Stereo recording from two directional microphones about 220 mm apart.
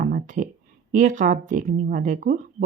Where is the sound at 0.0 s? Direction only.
35° right (ahead or behind).